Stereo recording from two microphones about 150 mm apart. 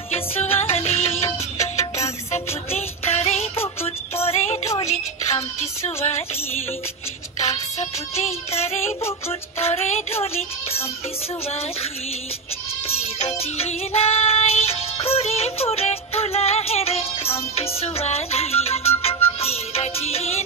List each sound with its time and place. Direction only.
0.1 s music: 45° left (ahead or behind)
7.3 s music: 45° left (ahead or behind)
11.4 s child singing: 40° left (ahead or behind)